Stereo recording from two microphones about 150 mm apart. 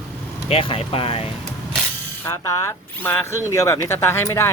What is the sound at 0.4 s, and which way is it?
Speech, 40° left (ahead or behind).